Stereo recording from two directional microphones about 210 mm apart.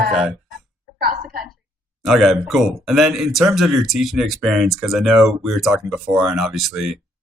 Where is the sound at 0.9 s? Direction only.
45° right (ahead or behind).